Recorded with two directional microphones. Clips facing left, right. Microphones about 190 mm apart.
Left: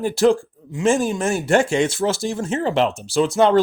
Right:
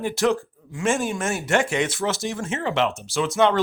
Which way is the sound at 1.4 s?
30° left (ahead or behind).